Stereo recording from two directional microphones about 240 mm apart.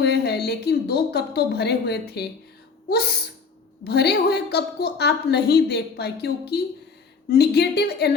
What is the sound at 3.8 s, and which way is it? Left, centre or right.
A woman's voice, left.